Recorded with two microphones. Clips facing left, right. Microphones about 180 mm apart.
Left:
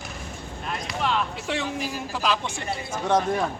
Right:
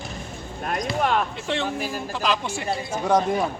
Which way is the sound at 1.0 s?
50° right (ahead or behind).